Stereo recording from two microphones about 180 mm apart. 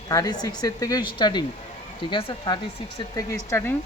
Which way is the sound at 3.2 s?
15° left (ahead or behind).